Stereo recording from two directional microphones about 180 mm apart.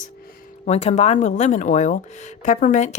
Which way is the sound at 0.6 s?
35° left (ahead or behind).